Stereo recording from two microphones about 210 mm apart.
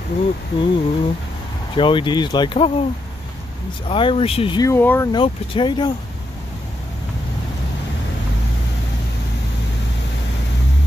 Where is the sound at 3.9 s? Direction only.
25° left (ahead or behind).